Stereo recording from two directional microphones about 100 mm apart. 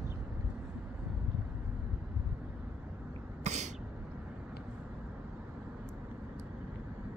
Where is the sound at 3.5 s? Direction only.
90° right.